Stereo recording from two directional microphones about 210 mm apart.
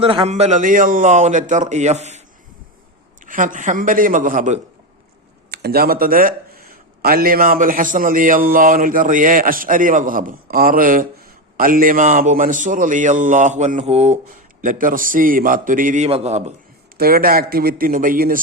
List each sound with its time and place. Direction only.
0.0 s speech: 25° right (ahead or behind)
3.2 s speech: 40° right (ahead or behind)
5.5 s speech: 50° right (ahead or behind); by 16.6 s 30° right (ahead or behind)
17.0 s speech: 45° right (ahead or behind)